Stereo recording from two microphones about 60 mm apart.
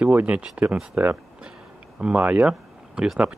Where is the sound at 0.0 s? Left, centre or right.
Right.